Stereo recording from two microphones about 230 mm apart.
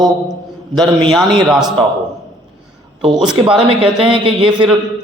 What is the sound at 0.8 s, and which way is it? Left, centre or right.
Speech, centre.